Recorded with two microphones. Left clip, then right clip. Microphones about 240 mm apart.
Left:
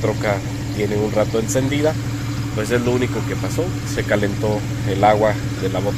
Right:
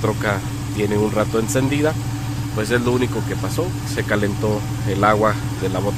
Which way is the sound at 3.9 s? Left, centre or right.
Centre.